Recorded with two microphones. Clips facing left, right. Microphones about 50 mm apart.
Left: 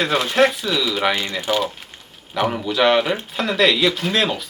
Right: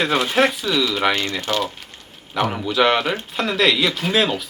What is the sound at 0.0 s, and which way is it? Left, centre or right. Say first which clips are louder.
Speech: left 1 dB; centre.